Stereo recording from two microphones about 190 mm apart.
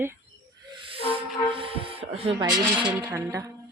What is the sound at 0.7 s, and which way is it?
Music, 30° right (ahead or behind).